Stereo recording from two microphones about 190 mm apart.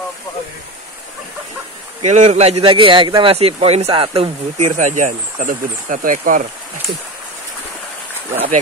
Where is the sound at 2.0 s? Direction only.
35° right (ahead or behind).